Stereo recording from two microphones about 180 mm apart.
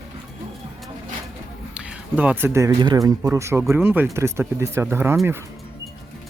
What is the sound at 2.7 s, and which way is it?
Speech, 25° right (ahead or behind).